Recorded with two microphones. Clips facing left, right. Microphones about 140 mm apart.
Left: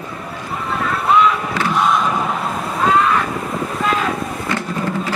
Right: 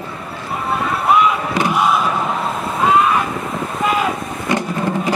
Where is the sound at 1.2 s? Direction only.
15° right (ahead or behind).